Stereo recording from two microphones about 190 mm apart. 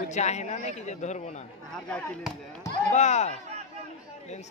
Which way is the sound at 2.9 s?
35° left (ahead or behind).